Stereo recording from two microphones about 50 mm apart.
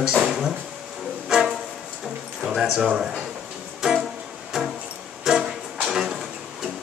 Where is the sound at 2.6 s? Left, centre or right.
Centre.